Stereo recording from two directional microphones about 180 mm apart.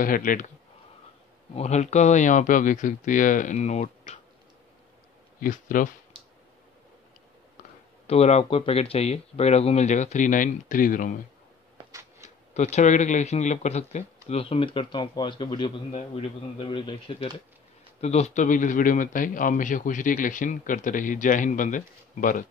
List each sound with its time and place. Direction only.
0.0 s a man's voice: 50° left (ahead or behind)
1.5 s a man's voice: 35° left (ahead or behind)
5.4 s a man's voice: 50° left (ahead or behind)
8.1 s speech: 35° left (ahead or behind)
11.9 s a sound: 15° right (ahead or behind)
12.5 s a man's voice: 40° left (ahead or behind)